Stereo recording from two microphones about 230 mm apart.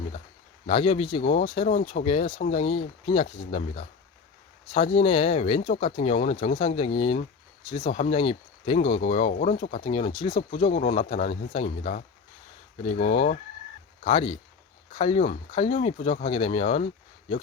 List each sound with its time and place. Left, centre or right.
0.7 s speech: left